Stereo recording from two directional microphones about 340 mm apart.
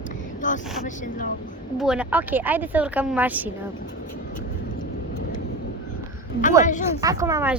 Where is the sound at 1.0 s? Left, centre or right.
Left.